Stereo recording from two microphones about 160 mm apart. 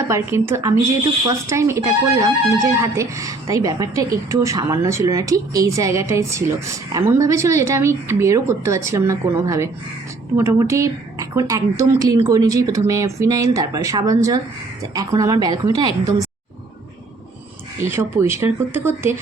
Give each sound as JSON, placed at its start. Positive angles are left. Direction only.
{"t": 0.1, "sound": "speech", "side_deg": -15}
{"t": 17.9, "sound": "speech", "side_deg": -15}